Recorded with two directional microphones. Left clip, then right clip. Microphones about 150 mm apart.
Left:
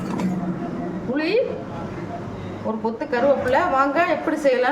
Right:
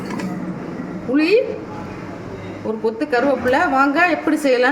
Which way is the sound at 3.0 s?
50° right (ahead or behind).